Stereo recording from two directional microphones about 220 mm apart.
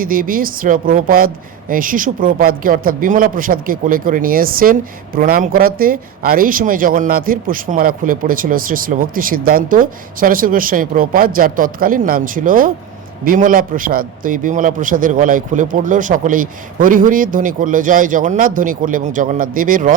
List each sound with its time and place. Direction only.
0.0 s speech: 40° right (ahead or behind)